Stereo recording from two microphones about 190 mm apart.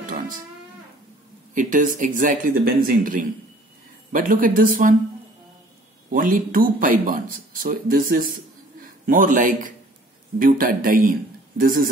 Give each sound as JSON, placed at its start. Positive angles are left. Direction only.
{"t": 1.5, "sound": "speech", "side_deg": -45}
{"t": 6.0, "sound": "a man's voice", "side_deg": -45}